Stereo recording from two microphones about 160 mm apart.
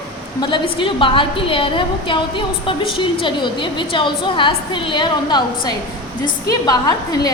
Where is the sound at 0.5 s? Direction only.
30° left (ahead or behind).